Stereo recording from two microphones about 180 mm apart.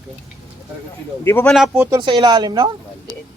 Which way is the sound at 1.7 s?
15° right (ahead or behind).